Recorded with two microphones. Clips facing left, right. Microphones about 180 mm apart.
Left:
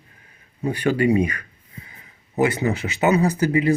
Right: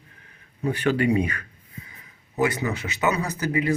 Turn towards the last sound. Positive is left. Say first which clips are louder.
# left 6 dB
turn(degrees=30)  # may be behind; listen again after turning